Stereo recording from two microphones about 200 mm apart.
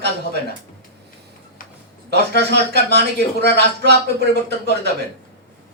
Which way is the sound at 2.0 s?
55° right (ahead or behind).